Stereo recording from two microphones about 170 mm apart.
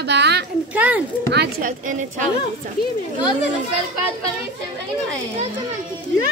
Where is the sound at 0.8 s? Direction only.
10° right (ahead or behind).